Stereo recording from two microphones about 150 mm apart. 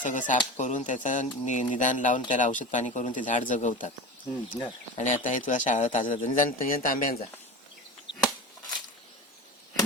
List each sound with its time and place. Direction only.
0.0 s a man's voice: 60° left (ahead or behind)
4.9 s a man's voice: 55° left (ahead or behind)